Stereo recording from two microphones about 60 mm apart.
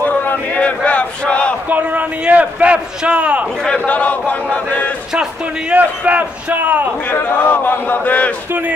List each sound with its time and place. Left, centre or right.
0.0 s a sound: left
1.7 s a man's voice: right
3.8 s chant: left
5.7 s a man's voice: right
7.2 s speech: left